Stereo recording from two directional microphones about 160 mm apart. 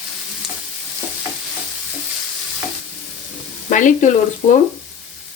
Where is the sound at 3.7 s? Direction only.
55° left (ahead or behind).